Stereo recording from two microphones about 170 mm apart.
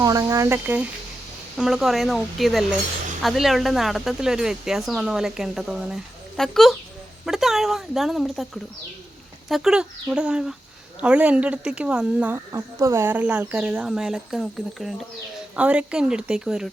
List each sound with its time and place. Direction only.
0.0 s speech: 20° right (ahead or behind); by 8.4 s centre (ahead or behind)
9.5 s speech: centre (ahead or behind)